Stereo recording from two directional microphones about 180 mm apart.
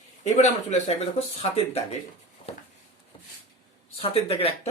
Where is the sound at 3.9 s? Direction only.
30° left (ahead or behind).